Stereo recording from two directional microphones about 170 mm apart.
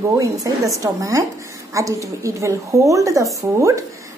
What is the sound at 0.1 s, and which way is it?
A woman's voice, 20° right (ahead or behind).